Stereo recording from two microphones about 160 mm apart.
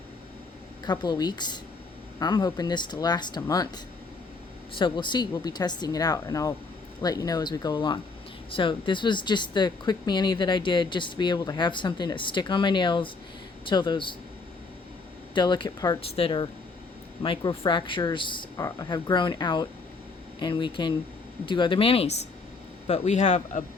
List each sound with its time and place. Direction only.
0.9 s speech: 25° left (ahead or behind)
4.7 s speech: 30° left (ahead or behind)
15.4 s speech: 30° left (ahead or behind); by 23.6 s 45° left (ahead or behind)